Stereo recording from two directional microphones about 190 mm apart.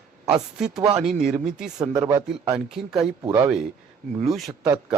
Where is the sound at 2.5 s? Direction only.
5° right (ahead or behind).